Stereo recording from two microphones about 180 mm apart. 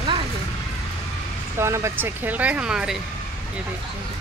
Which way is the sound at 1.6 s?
15° right (ahead or behind).